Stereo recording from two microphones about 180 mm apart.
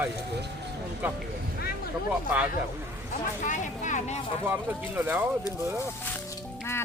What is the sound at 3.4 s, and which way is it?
Speech, 45° left (ahead or behind).